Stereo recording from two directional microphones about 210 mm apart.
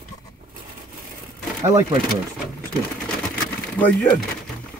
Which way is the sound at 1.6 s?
15° right (ahead or behind).